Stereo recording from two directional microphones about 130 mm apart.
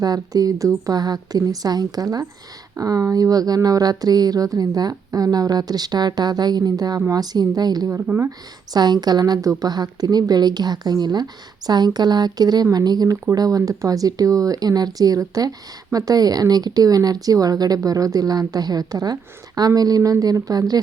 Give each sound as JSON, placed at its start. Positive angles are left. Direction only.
{"t": 0.0, "sound": "a woman's voice", "side_deg": -30}
{"t": 7.9, "sound": "speech", "side_deg": -15}
{"t": 8.7, "sound": "a woman's voice", "side_deg": -30}